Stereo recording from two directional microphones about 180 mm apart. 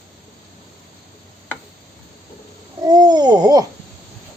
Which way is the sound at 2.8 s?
20° right (ahead or behind).